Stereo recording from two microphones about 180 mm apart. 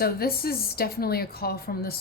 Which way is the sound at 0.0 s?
55° left (ahead or behind).